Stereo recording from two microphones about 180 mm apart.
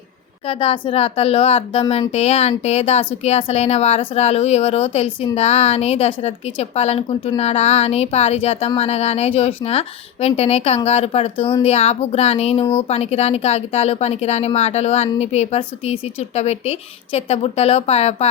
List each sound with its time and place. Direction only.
0.4 s speech: 30° left (ahead or behind)